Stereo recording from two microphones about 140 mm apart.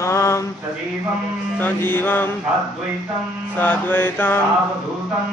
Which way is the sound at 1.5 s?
15° left (ahead or behind).